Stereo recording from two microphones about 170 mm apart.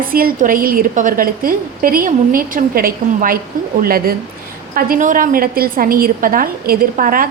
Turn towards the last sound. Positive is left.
turn(degrees=-55)  # may be behind; listen again after turning